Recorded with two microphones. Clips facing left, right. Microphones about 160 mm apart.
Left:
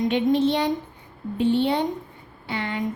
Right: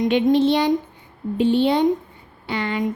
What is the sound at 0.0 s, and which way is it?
A woman's voice, 90° right.